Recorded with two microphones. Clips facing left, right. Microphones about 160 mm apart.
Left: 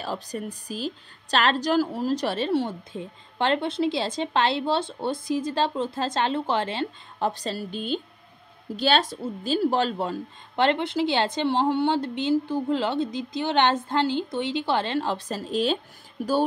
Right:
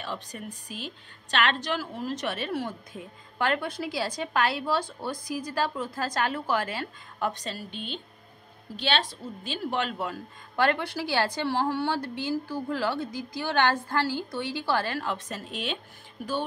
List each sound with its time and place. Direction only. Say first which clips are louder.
0.0 s a woman's voice: left 5 dB; 35° left (ahead or behind)